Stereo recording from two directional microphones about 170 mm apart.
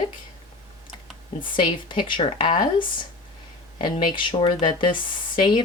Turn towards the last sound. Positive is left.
turn(degrees=25)  # may be behind; listen again after turning